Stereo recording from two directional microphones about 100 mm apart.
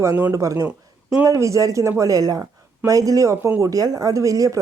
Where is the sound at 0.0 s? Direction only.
30° right (ahead or behind).